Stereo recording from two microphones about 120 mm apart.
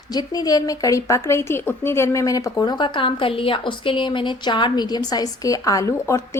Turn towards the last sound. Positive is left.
turn(degrees=25)  # may be behind; listen again after turning